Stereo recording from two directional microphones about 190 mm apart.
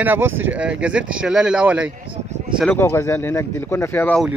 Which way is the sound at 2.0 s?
35° right (ahead or behind).